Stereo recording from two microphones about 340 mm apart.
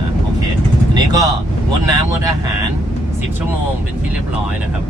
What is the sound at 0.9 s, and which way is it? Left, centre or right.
Vehicle, centre.